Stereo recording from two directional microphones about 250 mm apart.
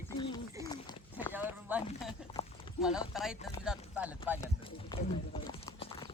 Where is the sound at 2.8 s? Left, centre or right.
Centre.